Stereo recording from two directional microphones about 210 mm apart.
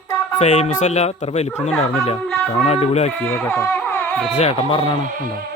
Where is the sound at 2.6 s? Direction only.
30° left (ahead or behind).